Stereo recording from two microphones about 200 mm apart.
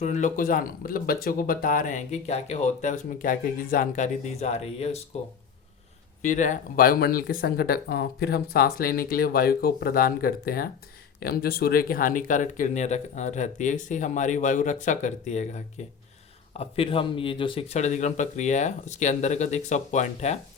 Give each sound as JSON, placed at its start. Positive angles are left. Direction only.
{"t": 0.0, "sound": "speech", "side_deg": 35}
{"t": 6.2, "sound": "speech", "side_deg": 40}